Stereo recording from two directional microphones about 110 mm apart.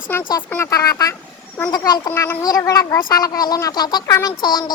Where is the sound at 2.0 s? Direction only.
20° left (ahead or behind).